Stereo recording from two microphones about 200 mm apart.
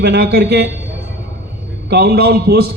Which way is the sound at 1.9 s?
50° right (ahead or behind).